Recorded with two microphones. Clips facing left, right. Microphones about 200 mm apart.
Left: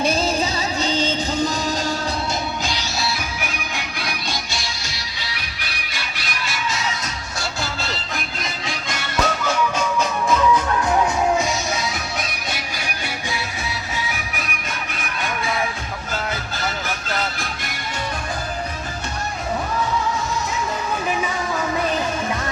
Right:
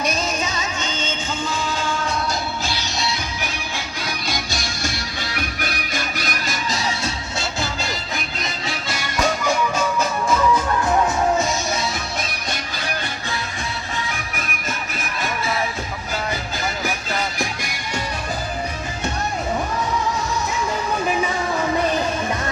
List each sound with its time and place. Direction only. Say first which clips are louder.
0.0 s music: left 3 dB; 30° left (ahead or behind)
2.6 s music: left 1 dB; 15° left (ahead or behind)
3.0 s music: even; 5° left (ahead or behind)
3.5 s music: even; 15° left (ahead or behind)
4.5 s music: right 4 dB; 50° right (ahead or behind)
7.3 s music: left 1 dB; 20° right (ahead or behind)
14.1 s music: even; centre (ahead or behind)
16.8 s music: right 1 dB; 10° right (ahead or behind)